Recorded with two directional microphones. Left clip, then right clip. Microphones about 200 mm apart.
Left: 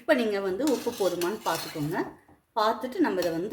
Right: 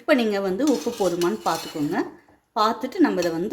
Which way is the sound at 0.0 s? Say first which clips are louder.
Right 4 dB; 30° right (ahead or behind).